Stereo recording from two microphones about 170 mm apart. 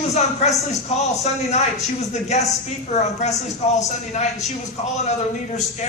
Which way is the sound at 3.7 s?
40° left (ahead or behind).